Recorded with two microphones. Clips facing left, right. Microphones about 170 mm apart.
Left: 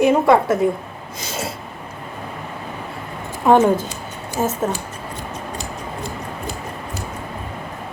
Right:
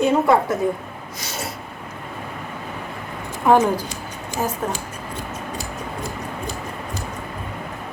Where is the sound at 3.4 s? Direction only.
20° left (ahead or behind).